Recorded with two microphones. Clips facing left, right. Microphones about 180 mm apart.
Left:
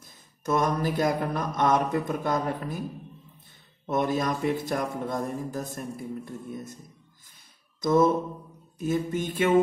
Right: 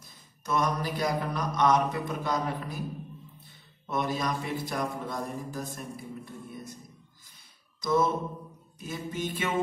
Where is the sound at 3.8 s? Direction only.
50° left (ahead or behind).